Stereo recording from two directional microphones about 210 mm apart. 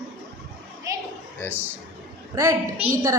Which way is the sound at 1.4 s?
10° left (ahead or behind).